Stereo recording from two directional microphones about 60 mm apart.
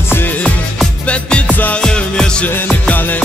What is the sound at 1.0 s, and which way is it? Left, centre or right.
Music, centre.